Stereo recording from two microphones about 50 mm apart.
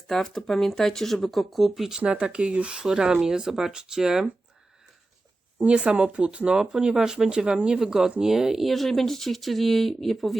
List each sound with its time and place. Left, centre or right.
0.1 s speech: centre
2.0 s speech: right
5.5 s speech: right
7.8 s speech: centre